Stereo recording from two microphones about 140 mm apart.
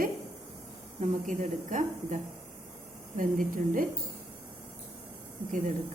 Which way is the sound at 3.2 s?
75° right (ahead or behind).